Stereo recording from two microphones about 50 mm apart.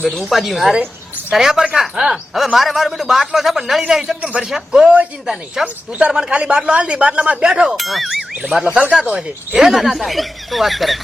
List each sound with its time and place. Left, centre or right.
0.2 s a man's voice: centre
4.2 s speech: right
4.4 s a man's voice: centre
5.6 s speech: right
6.1 s a man's voice: centre
6.3 s speech: right
7.4 s a man's voice: centre
7.8 s speech: centre
8.4 s speech: right
9.0 s a man's voice: centre